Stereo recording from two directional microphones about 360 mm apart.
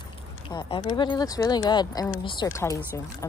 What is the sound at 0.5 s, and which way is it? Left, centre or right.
Speech, centre.